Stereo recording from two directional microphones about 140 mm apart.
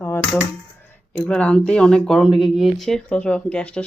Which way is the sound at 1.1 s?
5° left (ahead or behind).